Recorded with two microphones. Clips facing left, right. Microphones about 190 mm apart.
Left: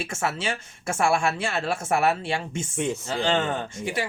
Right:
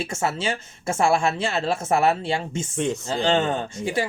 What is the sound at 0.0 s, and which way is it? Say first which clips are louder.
Speech: right 3 dB; 25° right (ahead or behind).